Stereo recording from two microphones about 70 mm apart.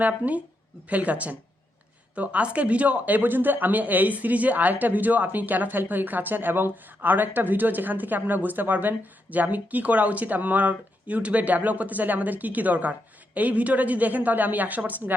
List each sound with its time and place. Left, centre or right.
0.0 s speech: right